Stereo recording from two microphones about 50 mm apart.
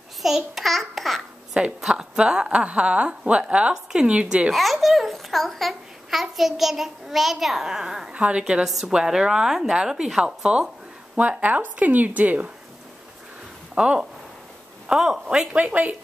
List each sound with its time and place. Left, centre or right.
0.2 s a child's voice: centre
1.6 s a woman's voice: right
4.5 s a child's voice: centre
8.1 s a woman's voice: right
11.1 s speech: right
13.7 s a woman's voice: centre
15.5 s a woman's voice: right